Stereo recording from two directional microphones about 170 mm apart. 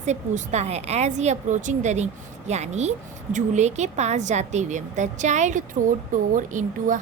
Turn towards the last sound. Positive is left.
turn(degrees=-50)  # may be behind; listen again after turning